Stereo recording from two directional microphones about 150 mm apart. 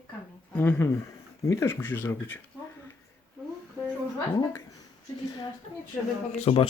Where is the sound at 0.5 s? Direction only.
15° left (ahead or behind).